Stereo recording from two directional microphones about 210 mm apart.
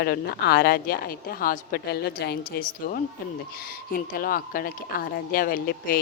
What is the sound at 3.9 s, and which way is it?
Speech, 45° left (ahead or behind).